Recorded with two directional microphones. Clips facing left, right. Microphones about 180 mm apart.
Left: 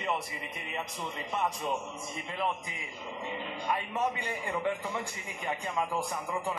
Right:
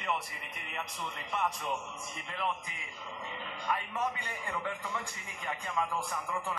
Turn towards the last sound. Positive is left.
turn(degrees=20)  # may be behind; listen again after turning